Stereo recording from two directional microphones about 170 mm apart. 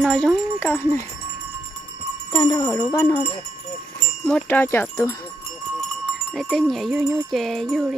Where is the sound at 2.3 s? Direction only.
20° left (ahead or behind).